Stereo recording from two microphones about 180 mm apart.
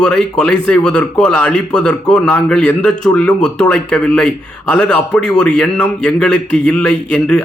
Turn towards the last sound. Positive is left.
turn(degrees=5)  # may be behind; listen again after turning